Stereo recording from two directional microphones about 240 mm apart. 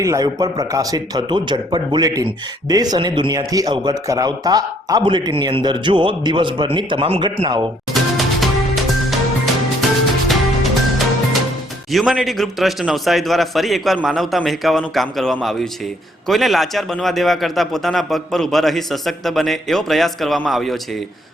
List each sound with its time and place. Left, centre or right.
0.0 s a man's voice: centre
8.4 s music: centre
10.2 s music: centre
11.9 s a man's voice: centre